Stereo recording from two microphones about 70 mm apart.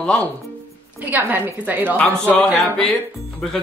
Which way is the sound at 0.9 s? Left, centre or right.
Right.